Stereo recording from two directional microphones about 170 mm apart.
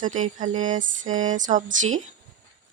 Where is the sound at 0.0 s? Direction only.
50° right (ahead or behind).